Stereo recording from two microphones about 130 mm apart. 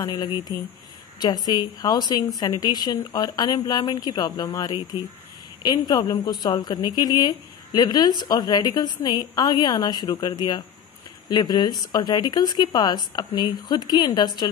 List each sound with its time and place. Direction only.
0.0 s a woman's voice: 30° left (ahead or behind)